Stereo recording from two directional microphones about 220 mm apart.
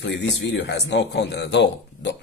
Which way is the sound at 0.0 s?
50° left (ahead or behind).